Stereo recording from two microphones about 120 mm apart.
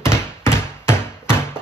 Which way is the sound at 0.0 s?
20° left (ahead or behind).